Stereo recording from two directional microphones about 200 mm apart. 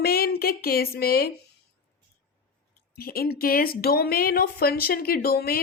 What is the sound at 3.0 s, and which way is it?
Speech, 50° left (ahead or behind).